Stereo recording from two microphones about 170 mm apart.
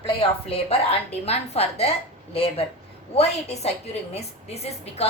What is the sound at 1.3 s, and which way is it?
A woman's voice, 35° left (ahead or behind).